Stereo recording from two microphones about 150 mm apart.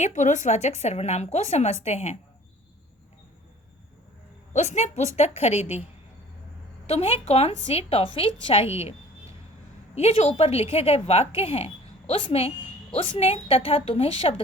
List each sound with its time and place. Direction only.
0.0 s speech: 55° left (ahead or behind)
4.5 s speech: 50° left (ahead or behind)
6.8 s a woman's voice: 45° left (ahead or behind)
9.9 s a woman's voice: 45° left (ahead or behind)